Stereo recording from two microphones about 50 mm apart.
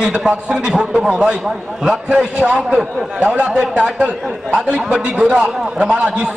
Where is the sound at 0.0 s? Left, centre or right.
Centre.